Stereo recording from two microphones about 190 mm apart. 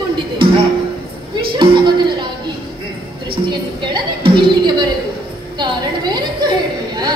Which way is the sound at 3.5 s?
25° right (ahead or behind).